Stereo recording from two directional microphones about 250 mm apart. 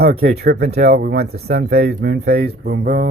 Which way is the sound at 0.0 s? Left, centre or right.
Right.